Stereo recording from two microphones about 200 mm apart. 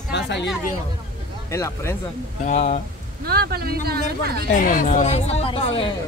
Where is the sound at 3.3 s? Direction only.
50° right (ahead or behind).